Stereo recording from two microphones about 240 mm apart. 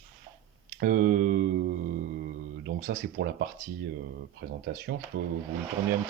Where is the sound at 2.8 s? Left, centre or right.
Right.